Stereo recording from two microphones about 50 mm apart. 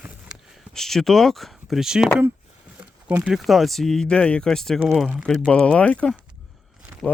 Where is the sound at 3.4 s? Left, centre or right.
Centre.